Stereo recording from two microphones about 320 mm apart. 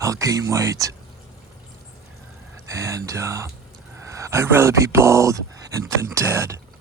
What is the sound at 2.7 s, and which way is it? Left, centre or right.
Speech, centre.